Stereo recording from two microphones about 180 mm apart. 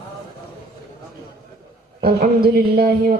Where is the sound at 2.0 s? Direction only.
60° right (ahead or behind).